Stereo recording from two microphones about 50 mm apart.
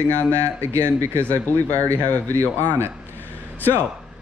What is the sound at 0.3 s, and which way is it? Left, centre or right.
Speech, right.